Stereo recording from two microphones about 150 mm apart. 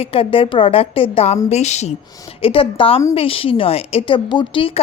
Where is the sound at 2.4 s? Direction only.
35° left (ahead or behind).